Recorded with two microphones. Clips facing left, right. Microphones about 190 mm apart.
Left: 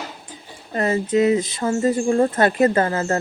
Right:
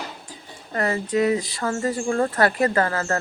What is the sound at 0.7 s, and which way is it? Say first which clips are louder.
Speech: left 3 dB; 20° left (ahead or behind).